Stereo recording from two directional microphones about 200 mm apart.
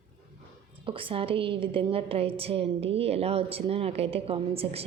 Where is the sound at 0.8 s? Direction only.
25° right (ahead or behind).